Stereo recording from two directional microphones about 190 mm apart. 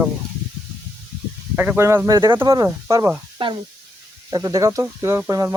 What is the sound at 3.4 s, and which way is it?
Speech, 25° right (ahead or behind).